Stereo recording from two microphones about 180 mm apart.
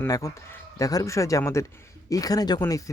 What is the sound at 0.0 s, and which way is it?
Speech, 20° left (ahead or behind).